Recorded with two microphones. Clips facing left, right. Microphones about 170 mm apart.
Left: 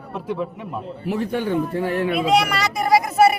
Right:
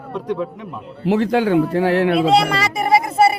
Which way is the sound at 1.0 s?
90° right.